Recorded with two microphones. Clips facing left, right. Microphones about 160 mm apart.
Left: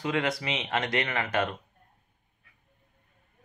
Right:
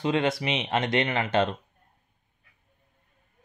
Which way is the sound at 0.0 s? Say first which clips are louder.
Right 4 dB; 25° right (ahead or behind).